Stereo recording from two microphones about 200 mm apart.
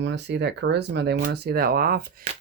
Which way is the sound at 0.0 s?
60° right (ahead or behind).